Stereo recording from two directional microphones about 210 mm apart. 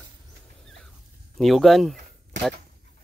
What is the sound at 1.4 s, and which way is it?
Speech, centre (ahead or behind).